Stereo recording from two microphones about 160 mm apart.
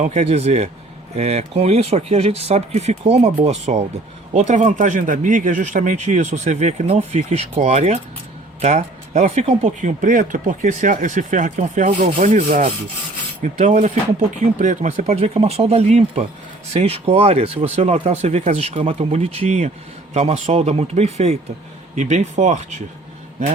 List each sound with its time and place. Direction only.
0.0 s speech: 45° right (ahead or behind)